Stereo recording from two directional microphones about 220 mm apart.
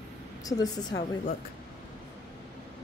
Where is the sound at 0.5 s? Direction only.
15° left (ahead or behind).